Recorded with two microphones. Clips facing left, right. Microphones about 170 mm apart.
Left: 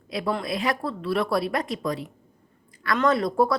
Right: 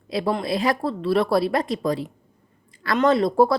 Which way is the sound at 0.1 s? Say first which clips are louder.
Right 4 dB; 30° right (ahead or behind).